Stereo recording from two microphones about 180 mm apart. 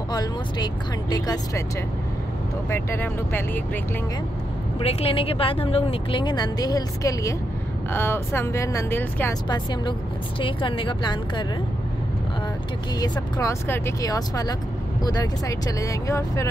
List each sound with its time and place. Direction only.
0.1 s speech: 20° left (ahead or behind)
2.7 s speech: 10° left (ahead or behind)
4.7 s speech: 30° left (ahead or behind); by 9.3 s 15° left (ahead or behind)
10.4 s speech: 30° left (ahead or behind)
13.0 s speech: 20° left (ahead or behind)